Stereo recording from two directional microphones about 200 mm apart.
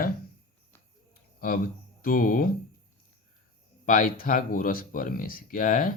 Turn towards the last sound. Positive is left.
turn(degrees=40)  # may be behind; listen again after turning